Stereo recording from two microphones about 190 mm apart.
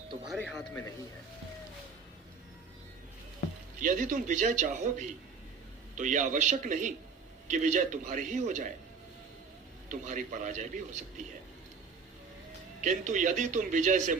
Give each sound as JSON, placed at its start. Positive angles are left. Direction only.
{"t": 0.3, "sound": "speech", "side_deg": 5}
{"t": 3.8, "sound": "speech", "side_deg": -45}
{"t": 9.9, "sound": "speech", "side_deg": -40}
{"t": 12.8, "sound": "speech", "side_deg": -40}